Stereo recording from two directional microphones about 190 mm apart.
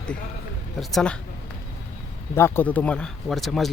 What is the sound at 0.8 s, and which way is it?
Speech, centre (ahead or behind).